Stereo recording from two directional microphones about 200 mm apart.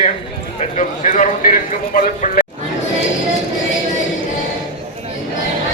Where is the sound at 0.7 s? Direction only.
40° left (ahead or behind).